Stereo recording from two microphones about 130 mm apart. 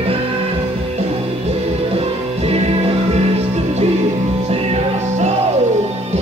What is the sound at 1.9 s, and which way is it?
Music, 50° right (ahead or behind).